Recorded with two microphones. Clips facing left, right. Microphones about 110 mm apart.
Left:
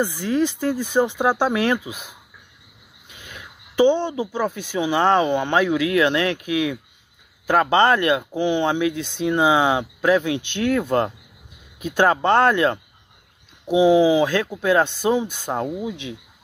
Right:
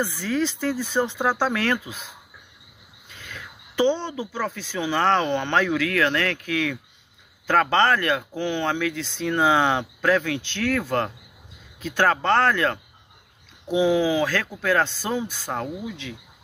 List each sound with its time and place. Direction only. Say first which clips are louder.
0.0 s speech: left 4 dB; 15° left (ahead or behind)